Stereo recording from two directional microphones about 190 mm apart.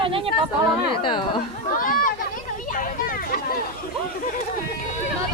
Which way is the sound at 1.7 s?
45° left (ahead or behind).